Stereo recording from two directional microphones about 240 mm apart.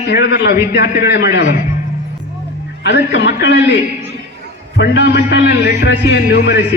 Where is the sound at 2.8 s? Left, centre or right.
Left.